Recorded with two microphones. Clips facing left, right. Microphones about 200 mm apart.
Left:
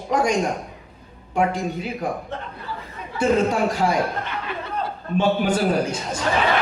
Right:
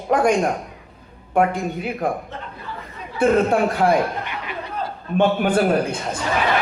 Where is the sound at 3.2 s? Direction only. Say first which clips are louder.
Right 3 dB; 55° right (ahead or behind).